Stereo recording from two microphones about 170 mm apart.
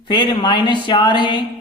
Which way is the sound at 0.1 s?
25° left (ahead or behind).